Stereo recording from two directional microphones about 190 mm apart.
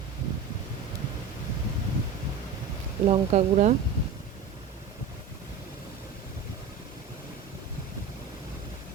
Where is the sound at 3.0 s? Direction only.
35° right (ahead or behind).